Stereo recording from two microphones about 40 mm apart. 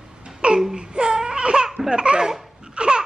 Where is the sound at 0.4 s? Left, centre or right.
Right.